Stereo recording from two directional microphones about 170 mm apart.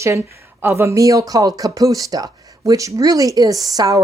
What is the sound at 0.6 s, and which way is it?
A woman's voice, 15° right (ahead or behind).